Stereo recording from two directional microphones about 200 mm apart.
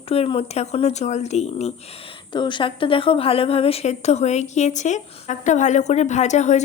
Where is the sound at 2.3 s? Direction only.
25° left (ahead or behind).